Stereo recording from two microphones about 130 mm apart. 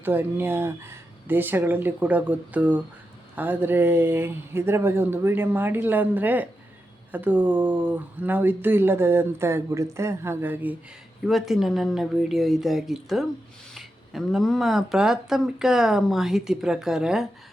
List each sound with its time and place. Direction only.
0.0 s speech: 15° right (ahead or behind)
11.3 s speech: centre (ahead or behind)